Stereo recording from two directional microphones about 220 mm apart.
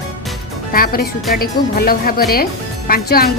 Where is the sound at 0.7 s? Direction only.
40° left (ahead or behind).